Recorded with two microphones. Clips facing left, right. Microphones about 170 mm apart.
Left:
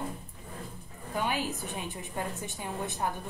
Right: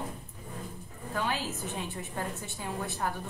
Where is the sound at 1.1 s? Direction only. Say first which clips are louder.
Left 1 dB; 15° left (ahead or behind).